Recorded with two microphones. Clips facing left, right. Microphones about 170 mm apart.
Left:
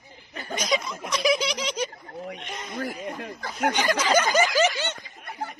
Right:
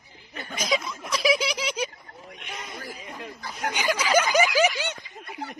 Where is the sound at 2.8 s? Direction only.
60° left (ahead or behind).